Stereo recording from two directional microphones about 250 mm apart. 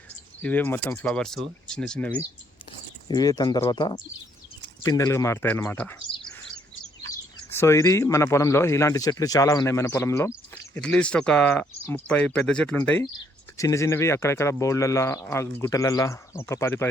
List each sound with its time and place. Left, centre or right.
0.4 s speech: centre
7.5 s speech: centre